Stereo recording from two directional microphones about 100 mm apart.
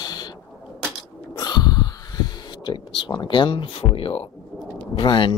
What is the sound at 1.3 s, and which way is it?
Gasp, 40° left (ahead or behind).